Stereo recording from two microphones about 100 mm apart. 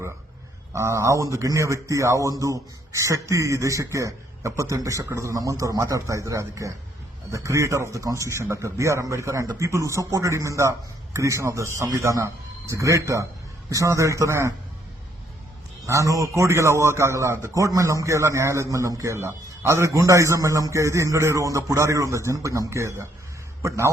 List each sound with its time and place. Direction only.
0.7 s a man's voice: 30° right (ahead or behind)
15.9 s a man's voice: 35° right (ahead or behind)